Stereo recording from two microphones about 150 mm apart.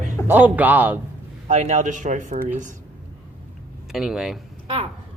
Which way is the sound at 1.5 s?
50° right (ahead or behind).